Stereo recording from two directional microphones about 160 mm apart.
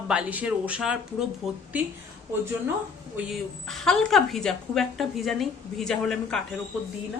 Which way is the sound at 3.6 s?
5° left (ahead or behind).